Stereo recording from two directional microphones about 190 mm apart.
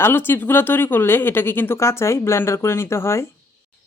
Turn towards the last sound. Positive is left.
turn(degrees=15)  # may be behind; listen again after turning